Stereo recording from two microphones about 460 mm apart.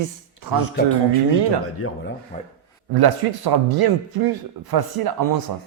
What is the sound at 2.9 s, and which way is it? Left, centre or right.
A man's voice, right.